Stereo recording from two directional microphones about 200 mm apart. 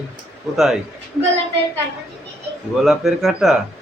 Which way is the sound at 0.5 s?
Centre (ahead or behind).